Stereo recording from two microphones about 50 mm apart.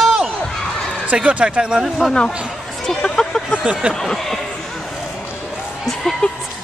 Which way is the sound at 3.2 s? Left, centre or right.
Centre.